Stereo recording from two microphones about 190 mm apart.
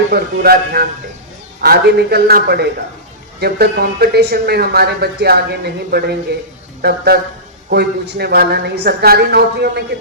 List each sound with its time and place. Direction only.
0.1 s speech: 55° right (ahead or behind)